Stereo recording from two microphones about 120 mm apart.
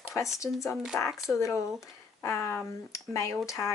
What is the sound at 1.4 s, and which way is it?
Speech, 25° left (ahead or behind).